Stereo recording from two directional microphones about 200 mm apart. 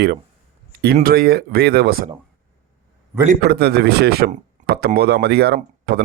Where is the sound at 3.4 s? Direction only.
55° right (ahead or behind).